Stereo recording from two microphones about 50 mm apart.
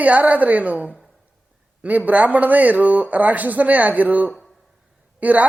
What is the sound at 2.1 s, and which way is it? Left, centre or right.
Speech, right.